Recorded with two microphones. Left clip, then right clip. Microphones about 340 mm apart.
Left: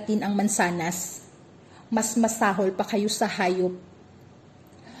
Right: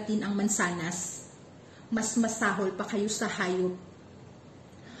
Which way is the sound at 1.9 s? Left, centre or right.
Left.